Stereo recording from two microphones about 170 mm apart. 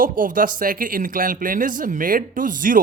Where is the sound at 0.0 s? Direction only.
55° right (ahead or behind).